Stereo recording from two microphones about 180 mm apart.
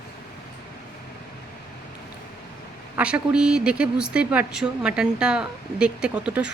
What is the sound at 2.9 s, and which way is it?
Speech, 5° right (ahead or behind).